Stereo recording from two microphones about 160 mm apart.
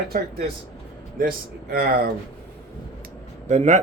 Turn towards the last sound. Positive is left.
turn(degrees=-50)  # may be behind; listen again after turning